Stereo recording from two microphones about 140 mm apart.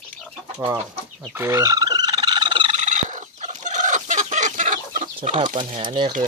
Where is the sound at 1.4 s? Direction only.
20° right (ahead or behind).